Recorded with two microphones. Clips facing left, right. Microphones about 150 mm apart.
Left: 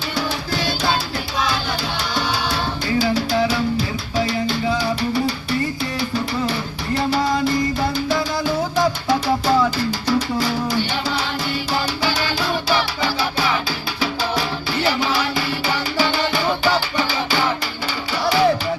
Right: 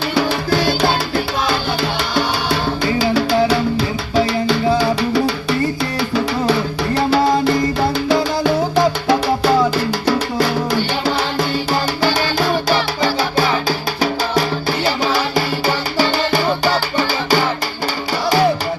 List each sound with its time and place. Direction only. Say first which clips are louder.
0.1 s music: right 7 dB; 60° right (ahead or behind)
12.4 s music: right 4 dB; 45° right (ahead or behind)